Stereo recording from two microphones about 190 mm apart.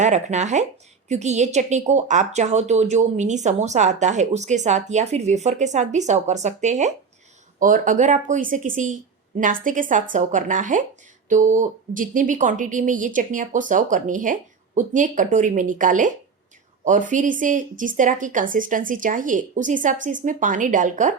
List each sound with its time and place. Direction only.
0.0 s speech: 40° right (ahead or behind)